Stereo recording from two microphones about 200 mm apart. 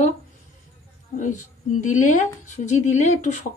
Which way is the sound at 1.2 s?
40° left (ahead or behind).